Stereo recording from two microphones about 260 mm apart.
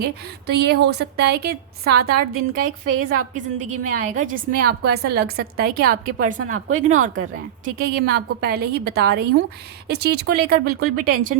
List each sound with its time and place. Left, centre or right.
0.0 s a woman's voice: right